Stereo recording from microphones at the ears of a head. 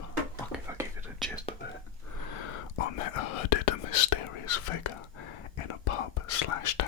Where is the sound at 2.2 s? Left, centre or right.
Left.